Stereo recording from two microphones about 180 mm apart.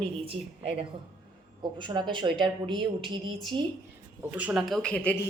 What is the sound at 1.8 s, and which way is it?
A woman's voice, 25° right (ahead or behind).